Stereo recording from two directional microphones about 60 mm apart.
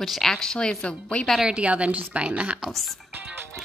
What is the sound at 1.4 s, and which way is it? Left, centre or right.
Speech, centre.